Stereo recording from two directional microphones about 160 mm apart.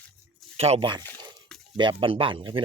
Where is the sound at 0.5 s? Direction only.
40° right (ahead or behind).